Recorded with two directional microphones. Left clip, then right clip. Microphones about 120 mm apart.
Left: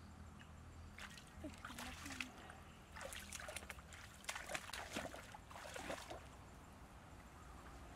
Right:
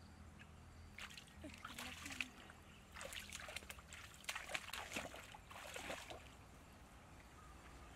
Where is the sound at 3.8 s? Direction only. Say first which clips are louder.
Right 1 dB; 5° right (ahead or behind).